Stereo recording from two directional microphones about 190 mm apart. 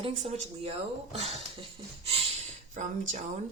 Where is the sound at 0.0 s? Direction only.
30° right (ahead or behind).